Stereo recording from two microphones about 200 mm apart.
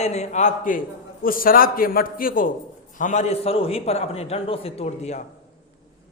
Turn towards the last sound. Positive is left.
turn(degrees=35)  # may be behind; listen again after turning